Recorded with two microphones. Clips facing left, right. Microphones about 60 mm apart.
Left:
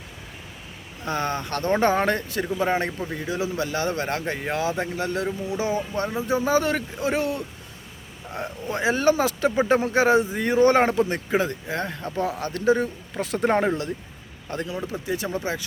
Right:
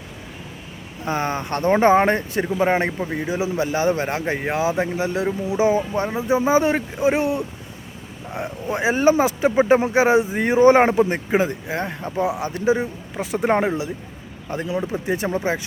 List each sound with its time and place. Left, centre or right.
1.0 s speech: right